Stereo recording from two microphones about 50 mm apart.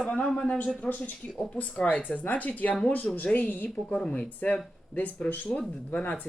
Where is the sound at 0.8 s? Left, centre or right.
Left.